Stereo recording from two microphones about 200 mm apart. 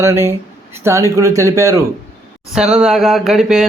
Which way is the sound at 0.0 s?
15° right (ahead or behind).